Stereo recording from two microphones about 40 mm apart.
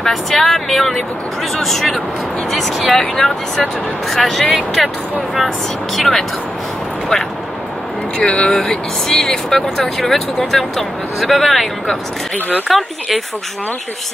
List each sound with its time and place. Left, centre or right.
0.0 s speech: centre
5.9 s speech: centre
8.2 s speech: left
8.5 s speech: centre